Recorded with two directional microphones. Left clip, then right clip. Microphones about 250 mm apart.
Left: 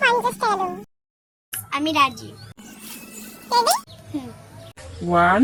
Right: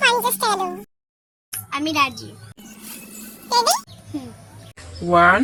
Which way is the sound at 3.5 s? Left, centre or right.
Centre.